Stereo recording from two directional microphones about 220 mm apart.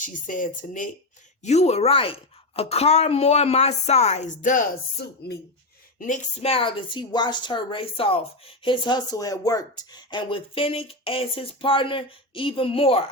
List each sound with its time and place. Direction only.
0.0 s a woman's voice: 35° left (ahead or behind)
6.0 s a woman's voice: 30° left (ahead or behind)